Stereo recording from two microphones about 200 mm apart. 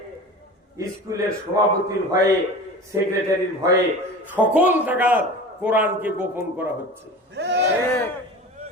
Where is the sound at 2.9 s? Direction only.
15° right (ahead or behind).